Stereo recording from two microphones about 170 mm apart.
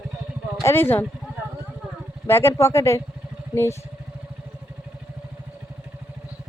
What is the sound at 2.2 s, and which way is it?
Speech, 15° left (ahead or behind).